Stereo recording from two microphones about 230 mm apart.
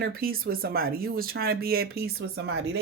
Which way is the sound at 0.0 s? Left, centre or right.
Right.